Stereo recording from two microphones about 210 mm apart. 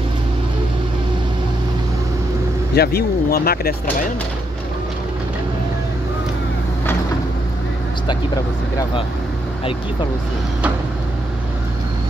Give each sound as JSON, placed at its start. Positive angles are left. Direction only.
{"t": 2.7, "sound": "speech", "side_deg": 50}
{"t": 8.1, "sound": "speech", "side_deg": 20}